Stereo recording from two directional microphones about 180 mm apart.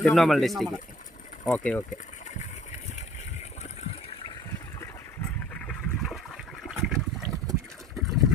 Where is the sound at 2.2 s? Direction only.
40° left (ahead or behind).